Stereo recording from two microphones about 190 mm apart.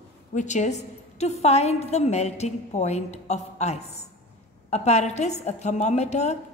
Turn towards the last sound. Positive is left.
turn(degrees=35)  # may be behind; listen again after turning